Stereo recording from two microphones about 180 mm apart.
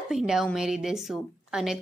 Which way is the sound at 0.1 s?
Centre (ahead or behind).